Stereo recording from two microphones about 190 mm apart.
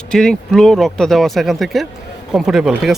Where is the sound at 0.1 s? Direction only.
5° left (ahead or behind).